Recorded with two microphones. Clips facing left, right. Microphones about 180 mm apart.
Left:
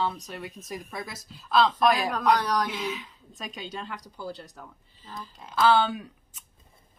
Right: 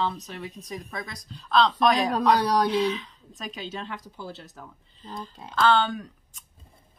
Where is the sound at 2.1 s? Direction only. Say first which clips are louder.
Right 3 dB; 35° right (ahead or behind).